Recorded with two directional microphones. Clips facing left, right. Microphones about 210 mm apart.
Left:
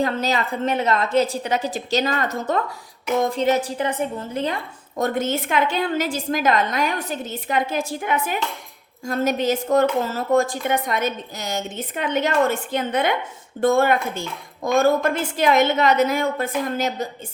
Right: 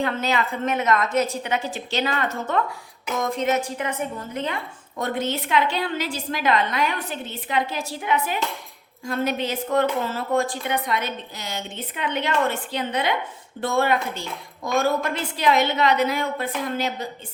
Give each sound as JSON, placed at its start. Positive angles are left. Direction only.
{"t": 0.0, "sound": "a woman's voice", "side_deg": 35}
{"t": 4.9, "sound": "a woman's voice", "side_deg": 45}